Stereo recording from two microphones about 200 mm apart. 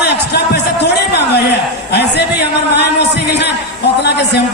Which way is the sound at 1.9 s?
55° left (ahead or behind).